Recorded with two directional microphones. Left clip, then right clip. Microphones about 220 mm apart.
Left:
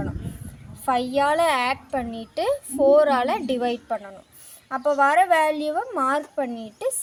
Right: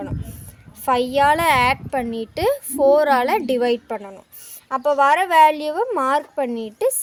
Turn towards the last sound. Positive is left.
turn(degrees=-50)  # may be behind; listen again after turning